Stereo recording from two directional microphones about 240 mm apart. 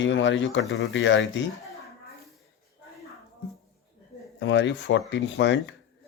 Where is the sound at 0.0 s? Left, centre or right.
Left.